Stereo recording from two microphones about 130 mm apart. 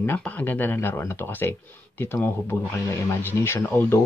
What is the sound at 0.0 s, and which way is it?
Speech, 15° left (ahead or behind).